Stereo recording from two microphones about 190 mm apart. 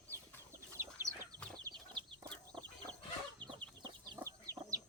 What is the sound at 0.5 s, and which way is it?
Chicken, 15° right (ahead or behind).